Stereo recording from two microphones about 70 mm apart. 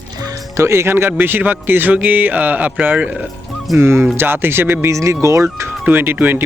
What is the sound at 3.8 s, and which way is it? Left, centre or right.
Speech, right.